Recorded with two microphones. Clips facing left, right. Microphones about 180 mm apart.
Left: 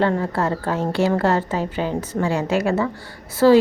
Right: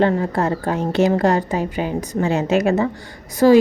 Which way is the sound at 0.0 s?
20° right (ahead or behind).